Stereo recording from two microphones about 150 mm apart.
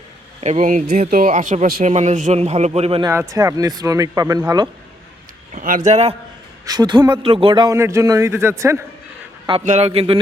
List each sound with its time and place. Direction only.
0.4 s speech: 55° right (ahead or behind)
1.8 s a man's voice: 50° right (ahead or behind)
3.0 s speech: 20° right (ahead or behind)
5.5 s speech: 65° right (ahead or behind); by 6.1 s 45° right (ahead or behind)
6.7 s speech: 30° right (ahead or behind)
7.8 s speech: 20° right (ahead or behind)
9.6 s a man's voice: 50° right (ahead or behind)